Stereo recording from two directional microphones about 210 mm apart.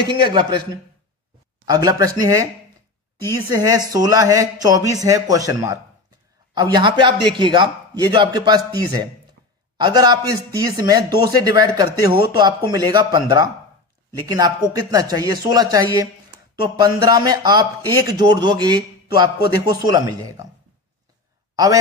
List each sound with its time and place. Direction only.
0.3 s speech: 20° right (ahead or behind)
1.7 s a man's voice: 15° right (ahead or behind)
3.5 s a man's voice: 15° right (ahead or behind)